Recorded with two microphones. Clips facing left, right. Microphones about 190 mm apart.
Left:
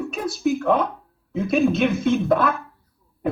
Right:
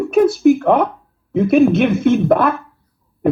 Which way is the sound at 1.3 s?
55° right (ahead or behind).